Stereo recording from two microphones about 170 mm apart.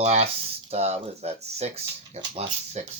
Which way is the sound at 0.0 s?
40° right (ahead or behind).